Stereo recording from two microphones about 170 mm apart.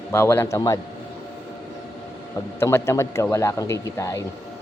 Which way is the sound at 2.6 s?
15° left (ahead or behind).